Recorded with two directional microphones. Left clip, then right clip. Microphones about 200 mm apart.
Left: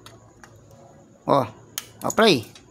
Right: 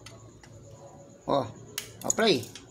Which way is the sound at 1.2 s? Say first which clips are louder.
Left 7 dB; 40° left (ahead or behind).